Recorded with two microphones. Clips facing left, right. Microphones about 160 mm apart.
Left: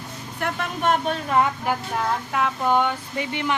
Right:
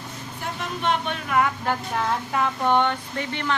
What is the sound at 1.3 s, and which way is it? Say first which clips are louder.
Speech: left 1 dB; 25° left (ahead or behind).